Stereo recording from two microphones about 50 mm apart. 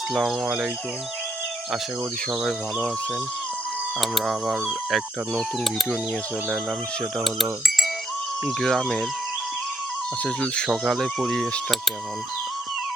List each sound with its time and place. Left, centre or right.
0.1 s speech: centre
4.0 s speech: centre
8.4 s speech: centre
10.2 s speech: centre
10.8 s speech: centre